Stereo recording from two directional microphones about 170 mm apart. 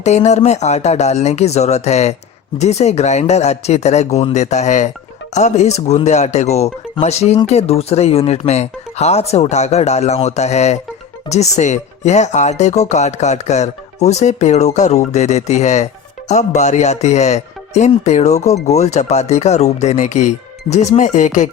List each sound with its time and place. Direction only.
0.0 s speech: 40° left (ahead or behind)